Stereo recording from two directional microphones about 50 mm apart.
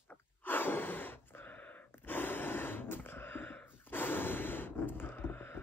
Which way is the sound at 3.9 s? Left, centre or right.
Left.